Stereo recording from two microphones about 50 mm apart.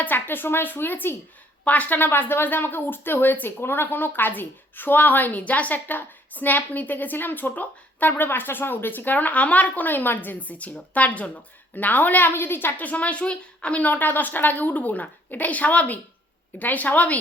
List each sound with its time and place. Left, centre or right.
0.0 s speech: left
1.6 s speech: left
12.7 s a woman's voice: left
13.8 s speech: left